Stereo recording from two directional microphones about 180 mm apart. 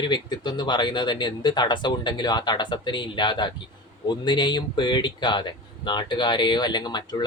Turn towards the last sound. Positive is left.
turn(degrees=25)  # may be behind; listen again after turning